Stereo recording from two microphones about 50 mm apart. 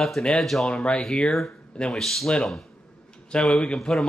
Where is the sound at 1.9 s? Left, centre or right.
Centre.